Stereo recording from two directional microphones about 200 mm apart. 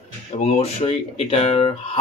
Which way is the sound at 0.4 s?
30° left (ahead or behind).